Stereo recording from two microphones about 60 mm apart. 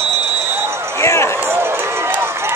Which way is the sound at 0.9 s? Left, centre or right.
Left.